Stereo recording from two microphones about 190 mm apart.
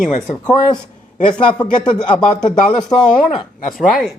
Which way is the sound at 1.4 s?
25° left (ahead or behind).